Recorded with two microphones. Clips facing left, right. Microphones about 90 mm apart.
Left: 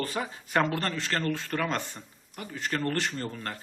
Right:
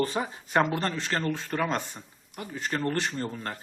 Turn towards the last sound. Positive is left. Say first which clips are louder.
# right 2 dB
turn(degrees=-15)  # may be behind; listen again after turning